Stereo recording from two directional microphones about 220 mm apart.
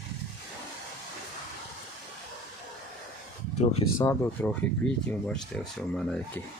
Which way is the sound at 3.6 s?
30° left (ahead or behind).